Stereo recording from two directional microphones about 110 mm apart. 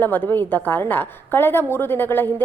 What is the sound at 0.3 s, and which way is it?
A woman's voice, 15° left (ahead or behind).